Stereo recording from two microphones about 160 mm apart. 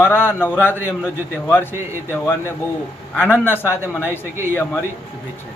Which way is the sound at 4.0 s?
15° right (ahead or behind).